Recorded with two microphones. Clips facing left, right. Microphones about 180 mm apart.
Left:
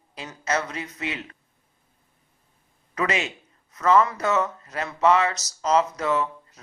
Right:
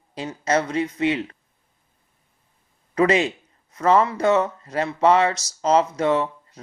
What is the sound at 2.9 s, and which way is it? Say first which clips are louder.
Speech: right 8 dB; 35° right (ahead or behind).